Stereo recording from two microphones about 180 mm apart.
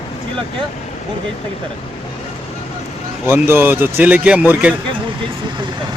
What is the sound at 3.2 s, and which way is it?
Speech, 10° right (ahead or behind).